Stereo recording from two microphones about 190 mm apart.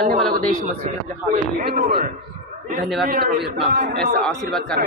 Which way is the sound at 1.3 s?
55° right (ahead or behind).